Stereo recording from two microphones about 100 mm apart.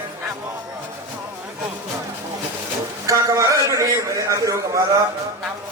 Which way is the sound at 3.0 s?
30° right (ahead or behind).